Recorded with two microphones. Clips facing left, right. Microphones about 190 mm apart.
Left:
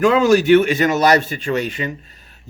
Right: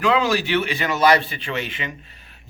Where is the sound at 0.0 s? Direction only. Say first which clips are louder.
Left 7 dB; 45° left (ahead or behind).